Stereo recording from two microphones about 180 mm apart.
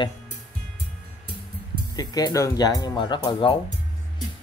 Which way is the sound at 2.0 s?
20° left (ahead or behind).